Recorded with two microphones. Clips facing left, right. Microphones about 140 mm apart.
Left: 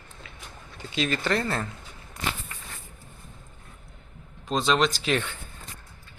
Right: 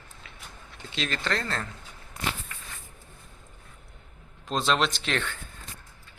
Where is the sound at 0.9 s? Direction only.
5° left (ahead or behind).